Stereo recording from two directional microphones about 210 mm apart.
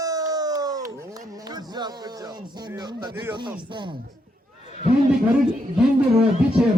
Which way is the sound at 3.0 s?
15° right (ahead or behind).